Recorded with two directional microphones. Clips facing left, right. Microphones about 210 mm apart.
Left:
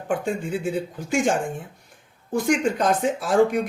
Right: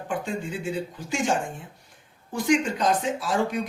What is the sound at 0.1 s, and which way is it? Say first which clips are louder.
Speech: left 5 dB; 50° left (ahead or behind).